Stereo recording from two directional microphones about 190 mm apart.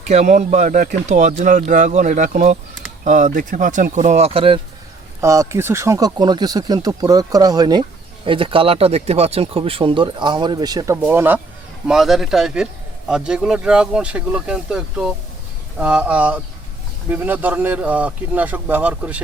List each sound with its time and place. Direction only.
0.1 s speech: 35° right (ahead or behind)
5.2 s speech: 15° right (ahead or behind)